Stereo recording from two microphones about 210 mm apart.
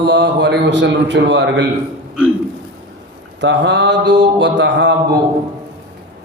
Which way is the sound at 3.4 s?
55° right (ahead or behind).